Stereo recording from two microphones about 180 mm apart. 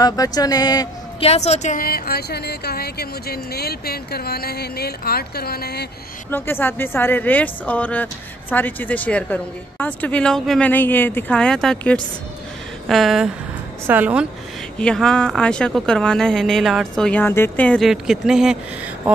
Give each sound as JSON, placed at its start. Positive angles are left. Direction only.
{"t": 0.0, "sound": "speech", "side_deg": 20}
{"t": 1.2, "sound": "speech", "side_deg": 35}
{"t": 6.3, "sound": "a woman's voice", "side_deg": 10}
{"t": 14.8, "sound": "speech", "side_deg": 5}